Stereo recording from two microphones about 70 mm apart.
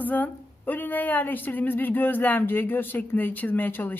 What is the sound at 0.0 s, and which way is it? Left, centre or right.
Speech, left.